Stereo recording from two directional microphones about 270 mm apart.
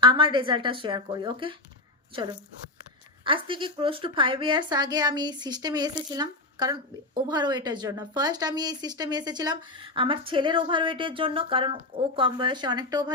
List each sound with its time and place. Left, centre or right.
0.0 s a woman's voice: centre
3.2 s a woman's voice: centre